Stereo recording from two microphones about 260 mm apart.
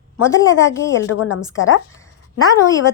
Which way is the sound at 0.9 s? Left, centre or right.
Left.